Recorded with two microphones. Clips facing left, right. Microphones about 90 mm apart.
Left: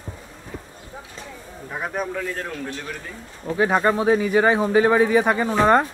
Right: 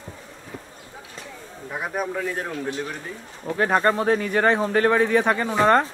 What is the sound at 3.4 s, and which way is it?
Speech, 5° left (ahead or behind).